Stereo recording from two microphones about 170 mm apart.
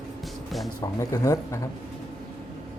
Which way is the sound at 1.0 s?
20° left (ahead or behind).